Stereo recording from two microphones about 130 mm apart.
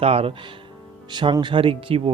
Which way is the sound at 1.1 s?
35° right (ahead or behind).